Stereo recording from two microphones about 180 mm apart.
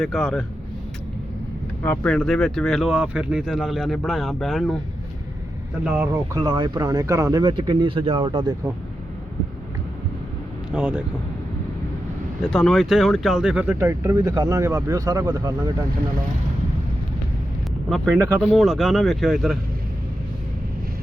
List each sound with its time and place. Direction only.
0.0 s speech: centre (ahead or behind)
1.8 s speech: 10° left (ahead or behind)
5.8 s speech: 10° right (ahead or behind)
6.3 s speech: 20° right (ahead or behind)
10.7 s speech: 5° right (ahead or behind)
12.5 s speech: centre (ahead or behind); by 15.7 s 20° right (ahead or behind)
17.8 s speech: centre (ahead or behind)